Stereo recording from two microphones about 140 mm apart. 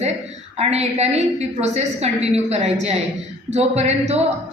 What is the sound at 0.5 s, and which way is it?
A woman's voice, 50° right (ahead or behind).